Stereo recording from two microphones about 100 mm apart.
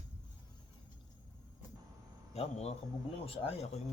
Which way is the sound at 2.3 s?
90° left.